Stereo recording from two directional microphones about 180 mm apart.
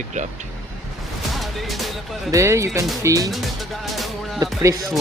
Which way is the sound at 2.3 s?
15° right (ahead or behind).